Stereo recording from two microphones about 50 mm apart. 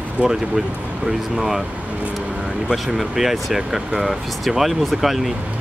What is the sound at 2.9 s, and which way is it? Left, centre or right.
Speech, centre.